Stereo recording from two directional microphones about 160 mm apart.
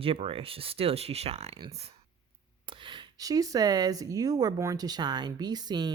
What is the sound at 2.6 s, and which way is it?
Speech, 30° right (ahead or behind).